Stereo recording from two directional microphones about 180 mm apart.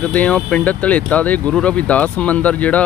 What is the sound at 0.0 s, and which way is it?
Speech, 10° left (ahead or behind).